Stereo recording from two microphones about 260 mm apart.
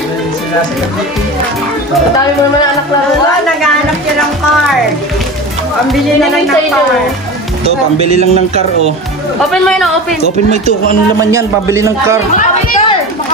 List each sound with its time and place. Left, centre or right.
7.6 s speech: right
9.5 s a man's voice: centre
11.2 s a man's voice: centre